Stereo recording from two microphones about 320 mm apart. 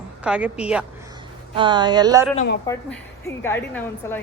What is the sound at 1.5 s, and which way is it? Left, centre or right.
Speech, centre.